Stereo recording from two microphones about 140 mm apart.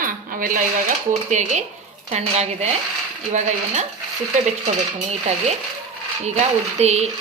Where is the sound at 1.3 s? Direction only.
60° right (ahead or behind).